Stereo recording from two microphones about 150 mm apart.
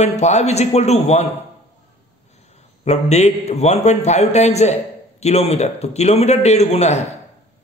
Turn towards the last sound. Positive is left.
turn(degrees=45)  # may be behind; listen again after turning